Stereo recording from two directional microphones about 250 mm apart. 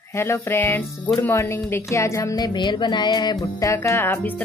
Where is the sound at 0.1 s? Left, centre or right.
Centre.